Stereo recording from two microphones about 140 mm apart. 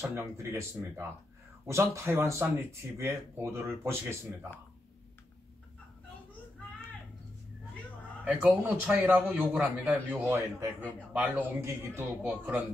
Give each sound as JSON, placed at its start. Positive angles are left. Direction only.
{"t": 0.0, "sound": "a man's voice", "side_deg": -15}
{"t": 8.3, "sound": "a man's voice", "side_deg": -10}
{"t": 10.2, "sound": "a man's voice", "side_deg": -15}